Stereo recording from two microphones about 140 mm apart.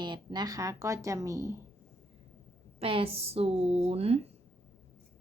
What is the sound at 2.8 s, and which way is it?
A woman's voice, 40° right (ahead or behind).